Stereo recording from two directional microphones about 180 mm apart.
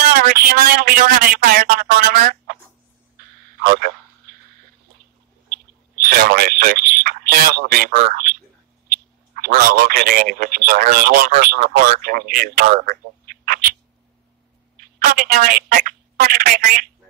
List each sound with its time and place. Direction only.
0.1 s a man's voice: 50° right (ahead or behind)
6.0 s a man's voice: 55° right (ahead or behind)
12.7 s telephone: 50° right (ahead or behind)
15.0 s a man's voice: 55° right (ahead or behind)